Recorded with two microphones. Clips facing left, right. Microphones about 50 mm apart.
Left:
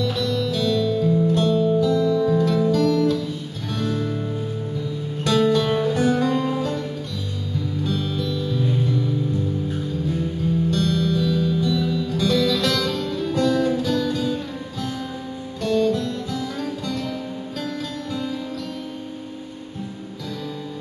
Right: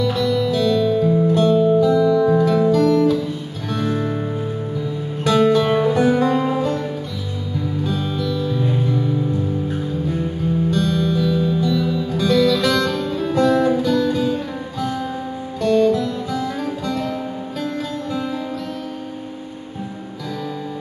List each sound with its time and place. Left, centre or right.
0.0 s music: centre